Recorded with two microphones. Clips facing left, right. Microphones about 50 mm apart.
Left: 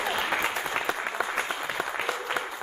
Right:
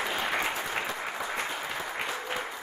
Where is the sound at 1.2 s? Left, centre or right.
Left.